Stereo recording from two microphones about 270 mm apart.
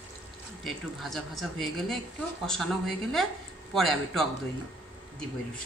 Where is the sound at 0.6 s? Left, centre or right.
Centre.